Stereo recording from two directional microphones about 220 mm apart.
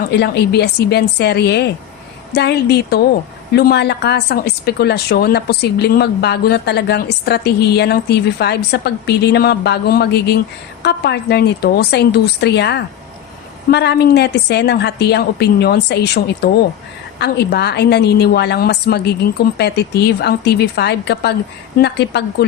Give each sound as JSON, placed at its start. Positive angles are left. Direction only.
{"t": 0.1, "sound": "a woman's voice", "side_deg": 50}